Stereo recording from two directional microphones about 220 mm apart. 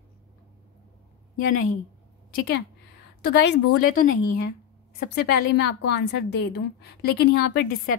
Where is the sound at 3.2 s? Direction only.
50° left (ahead or behind).